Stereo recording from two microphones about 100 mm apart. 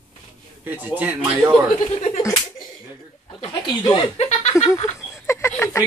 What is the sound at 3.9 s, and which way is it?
Speech, 60° left (ahead or behind).